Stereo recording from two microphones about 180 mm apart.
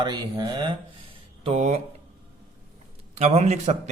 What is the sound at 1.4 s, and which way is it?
Speech, 35° right (ahead or behind).